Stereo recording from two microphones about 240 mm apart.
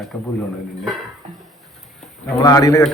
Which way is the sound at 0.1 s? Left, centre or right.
Centre.